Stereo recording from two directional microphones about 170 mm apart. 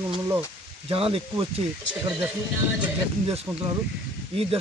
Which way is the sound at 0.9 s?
35° right (ahead or behind).